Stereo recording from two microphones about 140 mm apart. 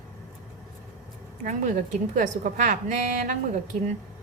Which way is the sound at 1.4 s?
60° right (ahead or behind).